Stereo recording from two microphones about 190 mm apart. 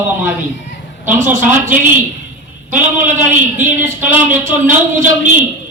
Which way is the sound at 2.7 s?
40° right (ahead or behind).